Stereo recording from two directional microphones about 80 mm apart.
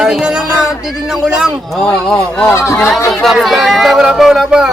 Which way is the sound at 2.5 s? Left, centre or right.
Left.